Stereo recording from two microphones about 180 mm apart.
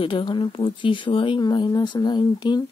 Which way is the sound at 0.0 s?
25° left (ahead or behind).